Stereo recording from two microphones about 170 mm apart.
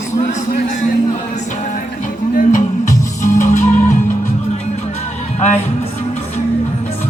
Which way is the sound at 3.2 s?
45° left (ahead or behind).